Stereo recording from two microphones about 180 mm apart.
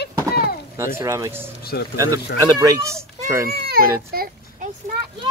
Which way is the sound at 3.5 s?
55° right (ahead or behind).